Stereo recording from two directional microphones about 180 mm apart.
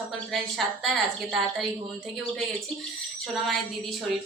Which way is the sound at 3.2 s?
Centre (ahead or behind).